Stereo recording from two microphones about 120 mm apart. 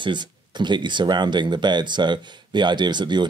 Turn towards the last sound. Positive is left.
turn(degrees=-40)  # may be behind; listen again after turning